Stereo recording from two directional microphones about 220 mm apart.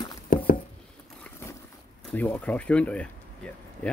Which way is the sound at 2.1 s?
10° left (ahead or behind).